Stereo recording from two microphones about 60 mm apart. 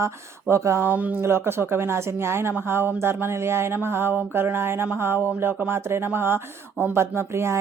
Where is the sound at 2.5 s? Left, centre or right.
Right.